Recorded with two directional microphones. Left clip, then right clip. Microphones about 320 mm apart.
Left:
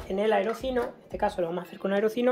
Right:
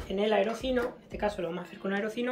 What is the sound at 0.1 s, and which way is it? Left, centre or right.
Speech, centre.